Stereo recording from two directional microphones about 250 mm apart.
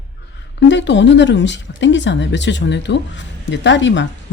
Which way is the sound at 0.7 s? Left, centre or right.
Left.